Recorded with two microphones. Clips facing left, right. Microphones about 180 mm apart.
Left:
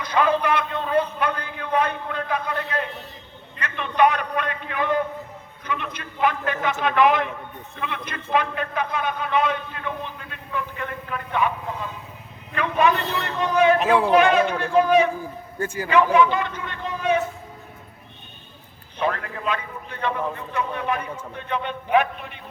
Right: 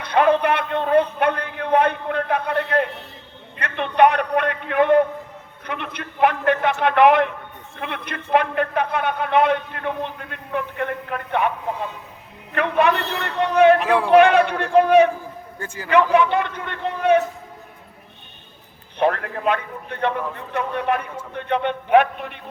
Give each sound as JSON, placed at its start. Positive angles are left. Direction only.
{"t": 0.0, "sound": "a sound", "side_deg": -60}
{"t": 12.5, "sound": "a man's voice", "side_deg": -60}
{"t": 13.7, "sound": "a man's voice", "side_deg": 20}
{"t": 14.1, "sound": "a man's voice", "side_deg": -60}
{"t": 16.1, "sound": "a man's voice", "side_deg": -60}
{"t": 18.9, "sound": "a man's voice", "side_deg": -60}